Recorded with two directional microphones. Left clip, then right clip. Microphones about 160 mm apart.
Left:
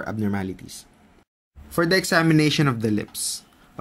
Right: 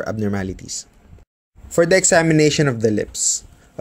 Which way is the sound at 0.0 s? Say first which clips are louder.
Right 4 dB; 40° right (ahead or behind).